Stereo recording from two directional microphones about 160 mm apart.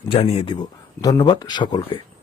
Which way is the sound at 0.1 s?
40° left (ahead or behind).